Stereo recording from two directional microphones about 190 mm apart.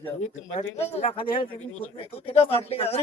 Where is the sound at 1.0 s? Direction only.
30° left (ahead or behind).